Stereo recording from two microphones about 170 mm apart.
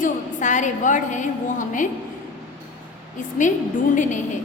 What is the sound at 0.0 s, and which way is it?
A woman's voice, 45° left (ahead or behind).